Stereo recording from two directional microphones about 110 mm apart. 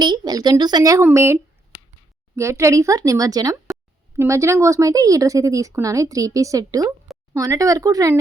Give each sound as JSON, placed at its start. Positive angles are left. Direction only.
{"t": 0.0, "sound": "speech", "side_deg": -40}